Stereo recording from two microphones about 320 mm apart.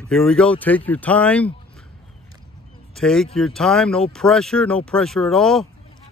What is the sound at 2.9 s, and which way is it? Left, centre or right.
Speech, centre.